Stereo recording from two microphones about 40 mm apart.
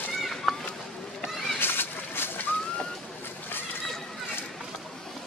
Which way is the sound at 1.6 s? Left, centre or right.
Left.